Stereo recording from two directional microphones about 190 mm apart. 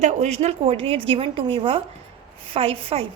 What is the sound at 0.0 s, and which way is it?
A woman's voice, 35° right (ahead or behind).